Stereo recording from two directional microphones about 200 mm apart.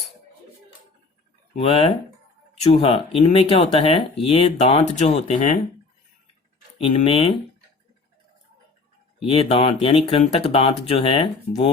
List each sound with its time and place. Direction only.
1.5 s speech: 30° left (ahead or behind)
6.7 s speech: 30° left (ahead or behind)
9.2 s speech: 30° left (ahead or behind)